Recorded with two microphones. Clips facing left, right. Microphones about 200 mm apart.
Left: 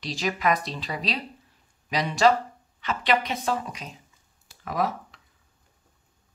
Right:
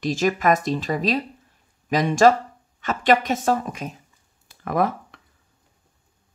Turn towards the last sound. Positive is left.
turn(degrees=-55)  # may be behind; listen again after turning